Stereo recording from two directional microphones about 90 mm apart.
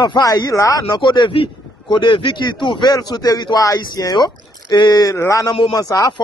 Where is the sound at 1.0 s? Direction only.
60° left (ahead or behind).